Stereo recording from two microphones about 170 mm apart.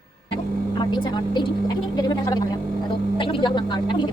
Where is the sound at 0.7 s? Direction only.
25° left (ahead or behind).